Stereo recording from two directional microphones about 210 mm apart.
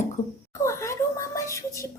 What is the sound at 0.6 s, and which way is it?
Speech, 15° left (ahead or behind).